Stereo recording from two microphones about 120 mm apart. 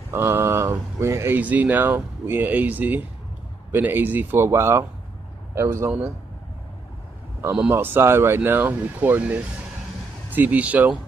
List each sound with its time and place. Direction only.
0.1 s a man's voice: 20° right (ahead or behind)
7.7 s speech: 20° right (ahead or behind)